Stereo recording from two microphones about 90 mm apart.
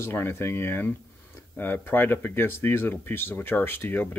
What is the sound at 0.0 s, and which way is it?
Speech, 25° left (ahead or behind).